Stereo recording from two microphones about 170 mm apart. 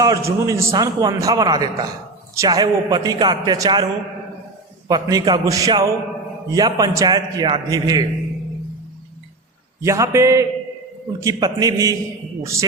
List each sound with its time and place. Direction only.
0.0 s a man's voice: 20° right (ahead or behind)
4.9 s a man's voice: 20° right (ahead or behind)
9.8 s a man's voice: 20° right (ahead or behind)